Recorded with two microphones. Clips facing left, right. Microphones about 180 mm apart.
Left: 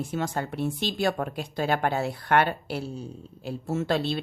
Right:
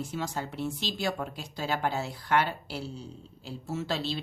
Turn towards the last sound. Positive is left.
turn(degrees=55)  # may be behind; listen again after turning